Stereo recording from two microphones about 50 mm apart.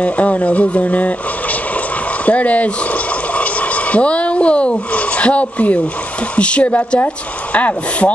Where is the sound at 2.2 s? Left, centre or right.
Left.